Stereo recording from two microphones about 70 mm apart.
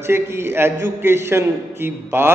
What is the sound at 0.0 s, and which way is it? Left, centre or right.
A man's voice, right.